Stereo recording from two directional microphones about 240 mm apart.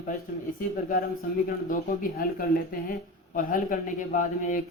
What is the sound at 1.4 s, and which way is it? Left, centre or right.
Speech, left.